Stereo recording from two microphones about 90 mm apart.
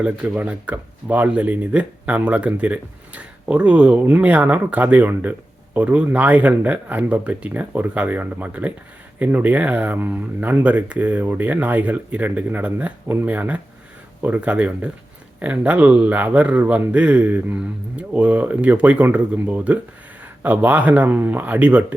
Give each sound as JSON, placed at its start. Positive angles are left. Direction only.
{"t": 0.0, "sound": "speech", "side_deg": -15}